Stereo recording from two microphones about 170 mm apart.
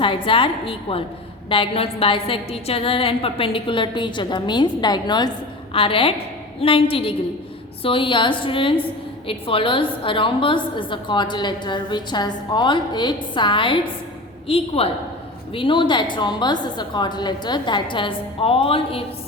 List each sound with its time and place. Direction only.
0.0 s a woman's voice: 30° left (ahead or behind)